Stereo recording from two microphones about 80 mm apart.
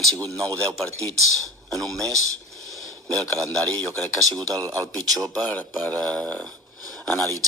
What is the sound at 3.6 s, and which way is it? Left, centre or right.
Speech, centre.